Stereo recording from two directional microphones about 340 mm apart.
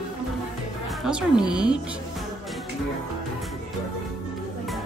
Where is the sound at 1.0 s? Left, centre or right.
Centre.